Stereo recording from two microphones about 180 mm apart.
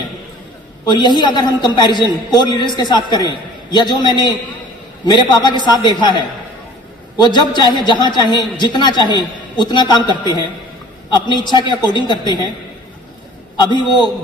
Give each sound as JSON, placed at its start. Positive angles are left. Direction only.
{"t": 0.9, "sound": "a woman's voice", "side_deg": 25}
{"t": 13.6, "sound": "a woman's voice", "side_deg": 25}